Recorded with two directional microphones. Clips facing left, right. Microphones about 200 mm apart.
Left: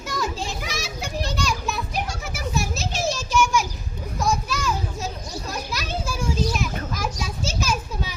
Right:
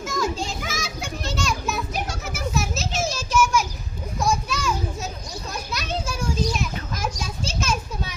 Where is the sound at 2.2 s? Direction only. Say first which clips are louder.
Right 1 dB; centre (ahead or behind).